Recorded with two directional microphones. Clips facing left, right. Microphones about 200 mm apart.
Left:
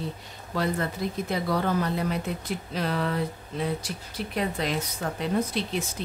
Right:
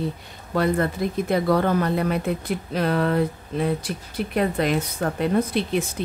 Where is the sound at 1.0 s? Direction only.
55° right (ahead or behind).